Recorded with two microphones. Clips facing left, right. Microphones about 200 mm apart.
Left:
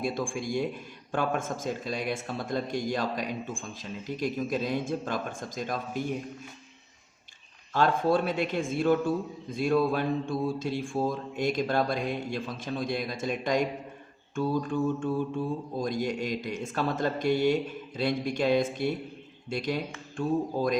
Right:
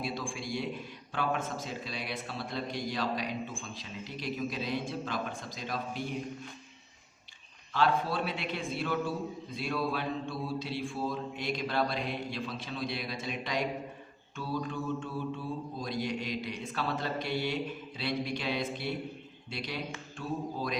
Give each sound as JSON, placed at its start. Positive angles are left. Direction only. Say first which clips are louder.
{"t": 0.0, "sound": "a man's voice", "louder": "left 6 dB", "side_deg": 50}
{"t": 7.7, "sound": "a man's voice", "louder": "left 5 dB", "side_deg": 45}